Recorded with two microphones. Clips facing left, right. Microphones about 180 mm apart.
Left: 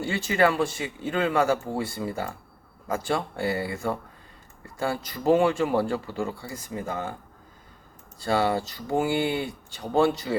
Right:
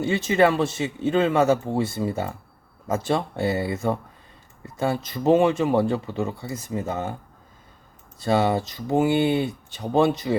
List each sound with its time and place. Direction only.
0.0 s speech: 20° right (ahead or behind)
8.2 s speech: 20° right (ahead or behind)